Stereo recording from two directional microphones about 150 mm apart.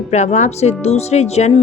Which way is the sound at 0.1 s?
50° left (ahead or behind).